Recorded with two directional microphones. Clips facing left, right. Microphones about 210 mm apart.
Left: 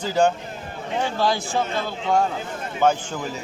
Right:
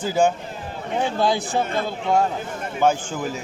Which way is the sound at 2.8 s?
10° right (ahead or behind).